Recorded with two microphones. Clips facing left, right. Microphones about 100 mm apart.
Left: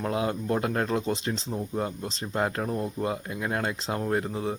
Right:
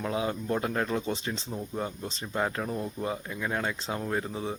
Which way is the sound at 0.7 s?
25° left (ahead or behind).